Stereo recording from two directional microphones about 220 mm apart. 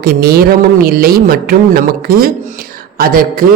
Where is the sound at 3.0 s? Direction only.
40° right (ahead or behind).